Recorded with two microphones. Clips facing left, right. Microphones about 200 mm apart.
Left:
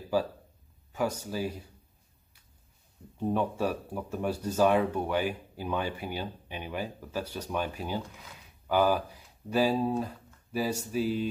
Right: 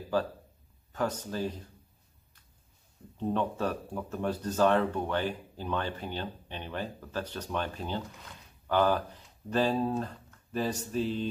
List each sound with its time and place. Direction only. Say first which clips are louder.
0.1 s speech: left 1 dB; 10° left (ahead or behind)
3.2 s speech: left 2 dB; 10° left (ahead or behind)